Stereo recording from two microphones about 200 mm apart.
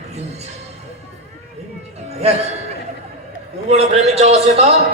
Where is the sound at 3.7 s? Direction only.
30° right (ahead or behind).